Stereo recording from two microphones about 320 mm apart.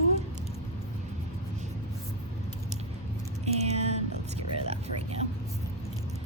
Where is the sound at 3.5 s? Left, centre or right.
Centre.